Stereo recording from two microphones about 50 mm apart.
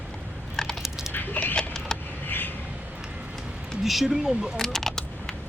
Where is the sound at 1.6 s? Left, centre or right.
Centre.